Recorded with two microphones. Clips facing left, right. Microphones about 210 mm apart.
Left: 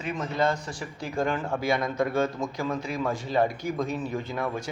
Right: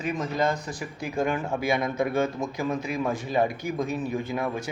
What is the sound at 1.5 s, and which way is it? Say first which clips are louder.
Speech: right 1 dB; 20° right (ahead or behind).